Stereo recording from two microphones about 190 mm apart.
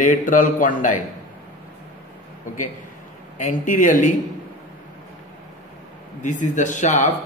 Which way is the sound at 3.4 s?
40° left (ahead or behind).